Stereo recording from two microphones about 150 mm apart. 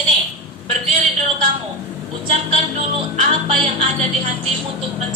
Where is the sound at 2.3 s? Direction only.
45° right (ahead or behind).